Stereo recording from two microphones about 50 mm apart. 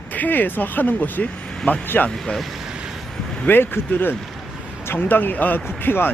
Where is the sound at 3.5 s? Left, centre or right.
Left.